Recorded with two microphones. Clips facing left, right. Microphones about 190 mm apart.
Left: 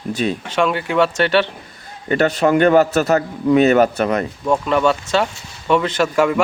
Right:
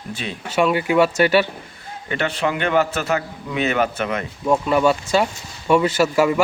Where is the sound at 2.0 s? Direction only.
40° left (ahead or behind).